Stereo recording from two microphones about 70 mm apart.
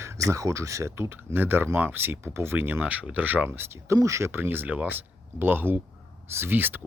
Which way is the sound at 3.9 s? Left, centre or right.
Right.